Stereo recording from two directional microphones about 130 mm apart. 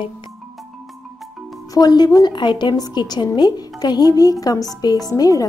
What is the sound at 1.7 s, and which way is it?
A woman's voice, 30° left (ahead or behind).